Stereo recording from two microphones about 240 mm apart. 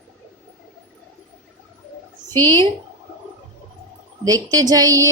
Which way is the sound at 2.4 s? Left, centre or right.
Centre.